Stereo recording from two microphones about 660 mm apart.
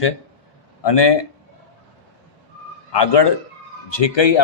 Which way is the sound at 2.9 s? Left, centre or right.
Left.